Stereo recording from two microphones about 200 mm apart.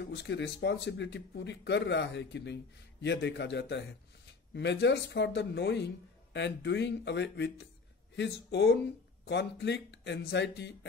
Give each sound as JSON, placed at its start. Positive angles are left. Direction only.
{"t": 0.1, "sound": "speech", "side_deg": 60}